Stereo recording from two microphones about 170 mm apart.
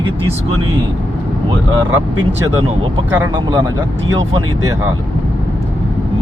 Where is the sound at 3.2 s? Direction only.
25° right (ahead or behind).